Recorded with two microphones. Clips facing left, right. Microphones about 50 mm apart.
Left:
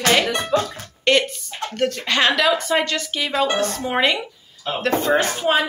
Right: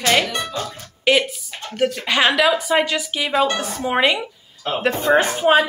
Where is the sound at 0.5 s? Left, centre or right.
Left.